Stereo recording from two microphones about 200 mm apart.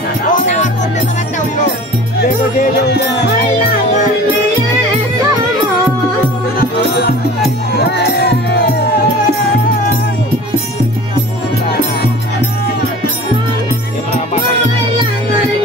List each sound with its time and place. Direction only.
0.3 s music: 35° left (ahead or behind)
6.6 s music: 50° left (ahead or behind)